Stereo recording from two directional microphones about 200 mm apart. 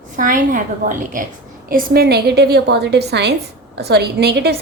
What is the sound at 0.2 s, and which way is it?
A woman's voice, 45° right (ahead or behind).